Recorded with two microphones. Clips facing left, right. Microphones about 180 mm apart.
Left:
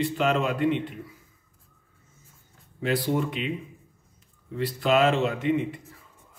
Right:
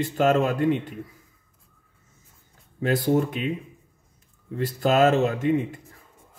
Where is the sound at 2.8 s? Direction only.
45° right (ahead or behind).